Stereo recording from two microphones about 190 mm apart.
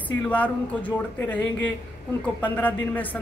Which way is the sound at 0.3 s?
10° left (ahead or behind).